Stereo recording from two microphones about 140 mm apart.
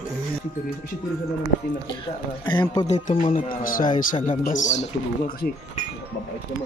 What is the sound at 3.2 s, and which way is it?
Speech, 80° left.